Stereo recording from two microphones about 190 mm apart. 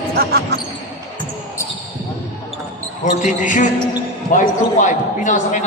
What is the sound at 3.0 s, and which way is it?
Speech, 40° left (ahead or behind).